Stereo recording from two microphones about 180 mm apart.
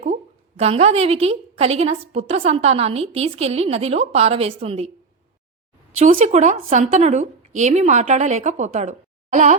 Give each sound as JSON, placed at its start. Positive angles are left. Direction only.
{"t": 0.0, "sound": "a woman's voice", "side_deg": -35}
{"t": 6.0, "sound": "a woman's voice", "side_deg": -45}